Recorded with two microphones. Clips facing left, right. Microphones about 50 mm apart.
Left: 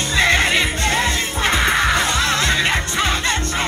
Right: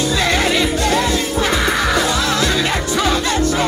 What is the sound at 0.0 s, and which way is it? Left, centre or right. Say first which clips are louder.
Music: even; left.